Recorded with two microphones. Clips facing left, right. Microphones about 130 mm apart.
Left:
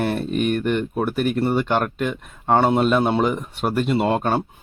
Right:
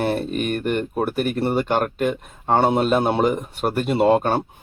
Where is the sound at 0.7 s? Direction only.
45° right (ahead or behind).